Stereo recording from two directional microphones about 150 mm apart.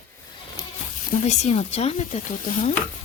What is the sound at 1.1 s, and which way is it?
Speech, 50° left (ahead or behind).